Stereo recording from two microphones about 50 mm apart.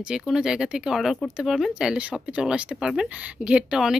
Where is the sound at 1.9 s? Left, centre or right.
Right.